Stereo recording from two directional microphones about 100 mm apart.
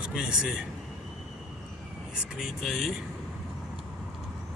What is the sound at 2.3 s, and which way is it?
Speech, 5° right (ahead or behind).